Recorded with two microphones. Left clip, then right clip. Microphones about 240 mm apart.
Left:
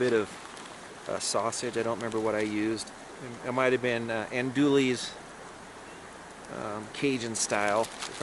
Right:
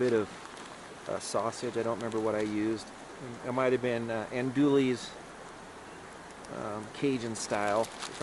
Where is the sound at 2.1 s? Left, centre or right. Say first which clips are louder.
Left 2 dB; centre.